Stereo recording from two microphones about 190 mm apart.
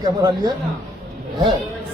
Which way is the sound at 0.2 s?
20° right (ahead or behind).